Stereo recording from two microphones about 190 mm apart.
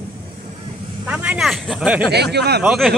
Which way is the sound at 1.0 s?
5° right (ahead or behind).